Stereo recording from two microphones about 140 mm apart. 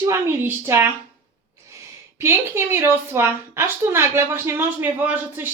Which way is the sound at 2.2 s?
15° right (ahead or behind).